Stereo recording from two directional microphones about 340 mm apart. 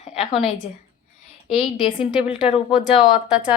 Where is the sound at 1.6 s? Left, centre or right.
Centre.